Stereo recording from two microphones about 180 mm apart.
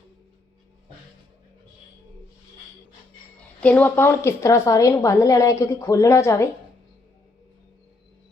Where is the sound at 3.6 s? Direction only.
10° left (ahead or behind).